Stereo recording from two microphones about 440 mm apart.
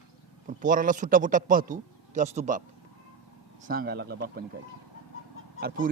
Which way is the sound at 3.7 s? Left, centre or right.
Right.